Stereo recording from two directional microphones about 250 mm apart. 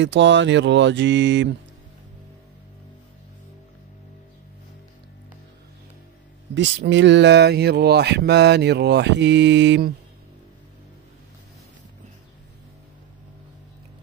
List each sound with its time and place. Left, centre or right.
0.0 s speech: right
6.5 s speech: right